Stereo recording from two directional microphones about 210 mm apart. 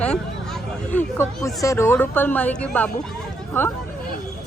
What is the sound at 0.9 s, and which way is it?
Speech, 15° left (ahead or behind).